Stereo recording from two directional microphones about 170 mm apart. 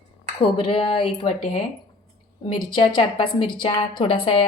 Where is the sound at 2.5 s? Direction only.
30° left (ahead or behind).